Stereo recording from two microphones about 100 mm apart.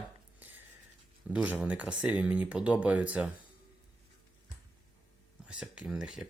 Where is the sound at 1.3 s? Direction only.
10° right (ahead or behind).